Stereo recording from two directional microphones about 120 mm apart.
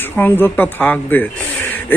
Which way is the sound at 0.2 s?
15° left (ahead or behind).